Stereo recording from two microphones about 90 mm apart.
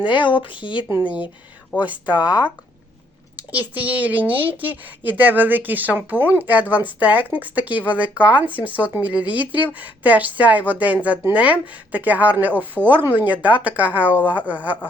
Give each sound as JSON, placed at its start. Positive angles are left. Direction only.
{"t": 0.0, "sound": "speech", "side_deg": 65}
{"t": 0.9, "sound": "speech", "side_deg": -20}